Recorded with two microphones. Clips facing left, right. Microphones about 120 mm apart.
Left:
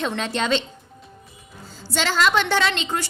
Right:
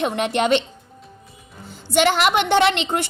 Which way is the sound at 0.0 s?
15° right (ahead or behind).